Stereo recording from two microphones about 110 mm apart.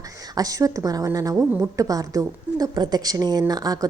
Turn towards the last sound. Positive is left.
turn(degrees=-35)  # may be behind; listen again after turning